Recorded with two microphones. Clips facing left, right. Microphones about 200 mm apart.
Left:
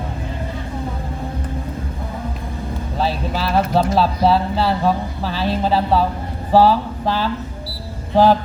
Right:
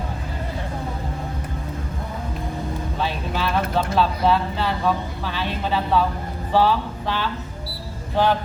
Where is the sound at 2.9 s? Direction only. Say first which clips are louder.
Left 6 dB; 35° left (ahead or behind).